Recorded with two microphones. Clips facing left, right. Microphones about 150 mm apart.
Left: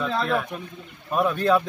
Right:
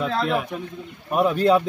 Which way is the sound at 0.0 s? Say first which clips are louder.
Right 1 dB; 15° right (ahead or behind).